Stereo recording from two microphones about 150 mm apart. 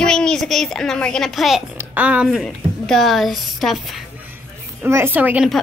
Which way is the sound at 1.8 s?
10° right (ahead or behind).